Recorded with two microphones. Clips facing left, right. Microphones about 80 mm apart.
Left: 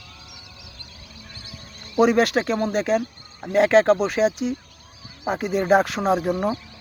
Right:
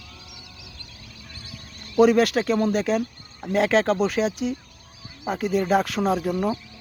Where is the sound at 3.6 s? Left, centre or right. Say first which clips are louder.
Left 4 dB; centre.